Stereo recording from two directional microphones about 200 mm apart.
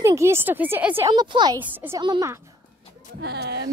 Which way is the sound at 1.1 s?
20° right (ahead or behind).